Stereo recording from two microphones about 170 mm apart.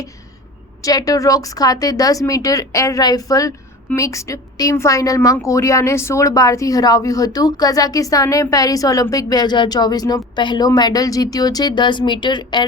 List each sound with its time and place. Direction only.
0.8 s a woman's voice: 20° left (ahead or behind)